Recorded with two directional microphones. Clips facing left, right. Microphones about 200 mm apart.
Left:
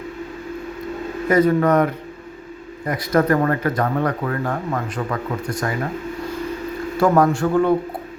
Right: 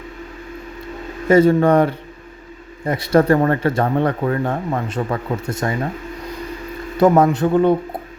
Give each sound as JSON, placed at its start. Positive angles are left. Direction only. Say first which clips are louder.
{"t": 1.3, "sound": "speech", "louder": "right 3 dB", "side_deg": -25}
{"t": 6.9, "sound": "speech", "louder": "right 3 dB", "side_deg": -20}